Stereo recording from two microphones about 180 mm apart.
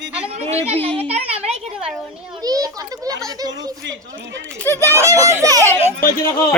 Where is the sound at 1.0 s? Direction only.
35° right (ahead or behind).